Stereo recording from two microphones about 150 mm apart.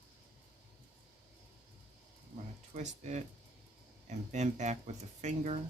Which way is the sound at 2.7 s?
50° right (ahead or behind).